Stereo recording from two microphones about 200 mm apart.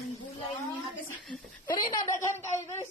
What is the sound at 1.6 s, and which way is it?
A woman's voice, 20° left (ahead or behind).